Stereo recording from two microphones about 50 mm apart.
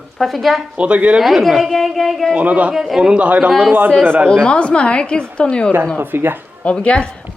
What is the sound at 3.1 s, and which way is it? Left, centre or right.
Speech, right.